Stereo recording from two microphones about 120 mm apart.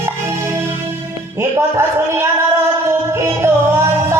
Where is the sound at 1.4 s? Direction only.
20° right (ahead or behind).